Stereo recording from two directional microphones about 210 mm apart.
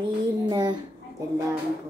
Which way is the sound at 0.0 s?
20° right (ahead or behind).